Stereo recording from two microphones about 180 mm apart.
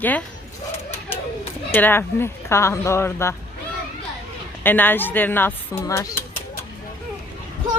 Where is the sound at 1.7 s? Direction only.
10° left (ahead or behind).